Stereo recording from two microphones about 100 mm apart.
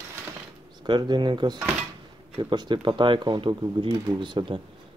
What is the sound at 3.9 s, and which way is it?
Speech, 40° right (ahead or behind).